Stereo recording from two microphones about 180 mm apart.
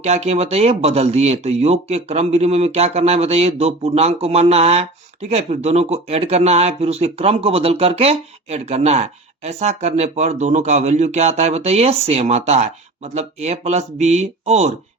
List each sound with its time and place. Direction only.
0.0 s speech: 35° right (ahead or behind)